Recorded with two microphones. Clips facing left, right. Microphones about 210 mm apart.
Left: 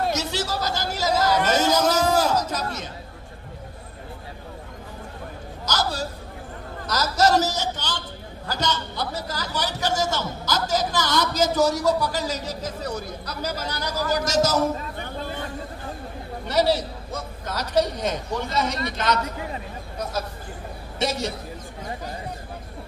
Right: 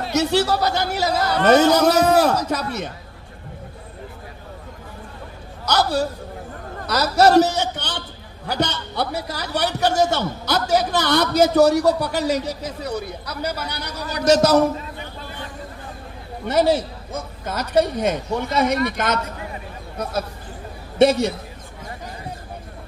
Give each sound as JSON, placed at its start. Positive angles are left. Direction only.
{"t": 0.1, "sound": "a man's voice", "side_deg": -60}
{"t": 5.7, "sound": "a sound", "side_deg": -60}
{"t": 6.9, "sound": "a man's voice", "side_deg": -60}
{"t": 16.4, "sound": "a man's voice", "side_deg": -50}
{"t": 21.0, "sound": "a man's voice", "side_deg": -60}